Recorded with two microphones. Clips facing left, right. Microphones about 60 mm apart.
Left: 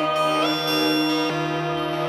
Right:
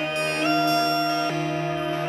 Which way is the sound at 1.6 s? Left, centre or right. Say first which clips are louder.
Left 2 dB; right.